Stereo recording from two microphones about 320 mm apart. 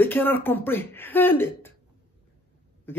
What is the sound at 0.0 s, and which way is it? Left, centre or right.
A man's voice, centre.